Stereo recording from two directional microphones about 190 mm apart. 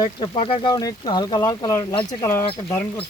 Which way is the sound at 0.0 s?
25° left (ahead or behind).